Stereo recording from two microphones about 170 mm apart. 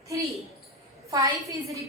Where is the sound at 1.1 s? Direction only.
20° right (ahead or behind).